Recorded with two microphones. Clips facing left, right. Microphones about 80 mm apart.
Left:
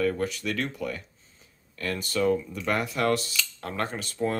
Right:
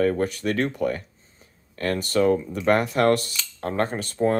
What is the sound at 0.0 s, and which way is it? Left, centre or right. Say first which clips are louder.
Speech: right 5 dB; right.